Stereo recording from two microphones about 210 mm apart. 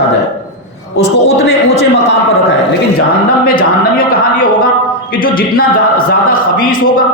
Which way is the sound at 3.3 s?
45° left (ahead or behind).